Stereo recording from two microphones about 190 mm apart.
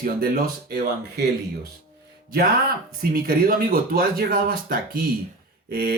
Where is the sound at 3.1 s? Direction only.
50° right (ahead or behind).